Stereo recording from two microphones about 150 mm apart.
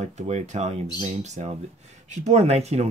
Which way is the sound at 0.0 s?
50° right (ahead or behind).